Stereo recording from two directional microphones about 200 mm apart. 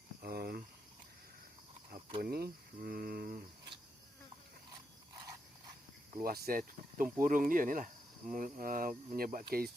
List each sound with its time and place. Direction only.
0.2 s cricket: 50° right (ahead or behind)
2.2 s speech: 50° right (ahead or behind)
6.1 s speech: 50° right (ahead or behind)